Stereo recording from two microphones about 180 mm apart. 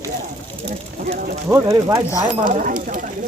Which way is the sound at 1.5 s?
15° right (ahead or behind).